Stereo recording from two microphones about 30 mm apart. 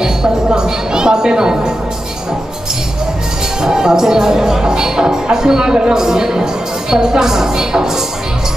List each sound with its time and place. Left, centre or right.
0.5 s a woman's voice: right
3.6 s speech: right